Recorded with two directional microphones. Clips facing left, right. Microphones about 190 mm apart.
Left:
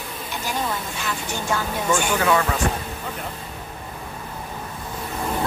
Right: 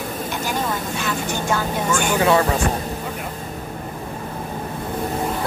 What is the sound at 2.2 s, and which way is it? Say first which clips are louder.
Speech: right 4 dB; 35° right (ahead or behind).